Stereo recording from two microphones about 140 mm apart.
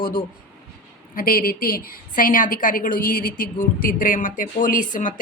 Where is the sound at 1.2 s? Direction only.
90° left.